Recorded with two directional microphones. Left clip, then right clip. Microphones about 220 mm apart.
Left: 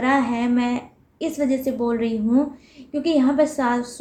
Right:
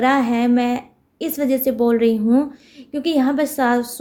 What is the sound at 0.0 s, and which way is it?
A woman's voice, 50° right (ahead or behind).